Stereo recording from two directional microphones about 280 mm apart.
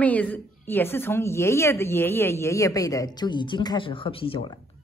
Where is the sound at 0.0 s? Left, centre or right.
Centre.